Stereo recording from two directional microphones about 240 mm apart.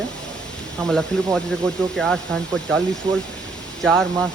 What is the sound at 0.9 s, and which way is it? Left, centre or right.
A man's voice, centre.